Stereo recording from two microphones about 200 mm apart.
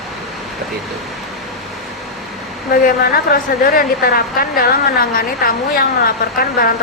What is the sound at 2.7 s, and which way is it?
A woman's voice, 45° left (ahead or behind).